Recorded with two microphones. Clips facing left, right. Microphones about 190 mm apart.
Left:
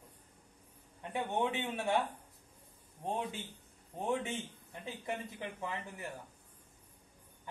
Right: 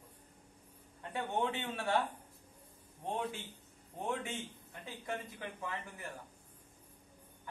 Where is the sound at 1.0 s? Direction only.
15° left (ahead or behind).